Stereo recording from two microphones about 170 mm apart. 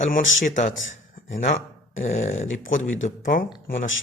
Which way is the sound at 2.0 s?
45° left (ahead or behind).